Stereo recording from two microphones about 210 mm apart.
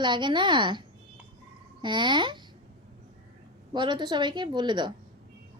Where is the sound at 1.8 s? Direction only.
20° right (ahead or behind).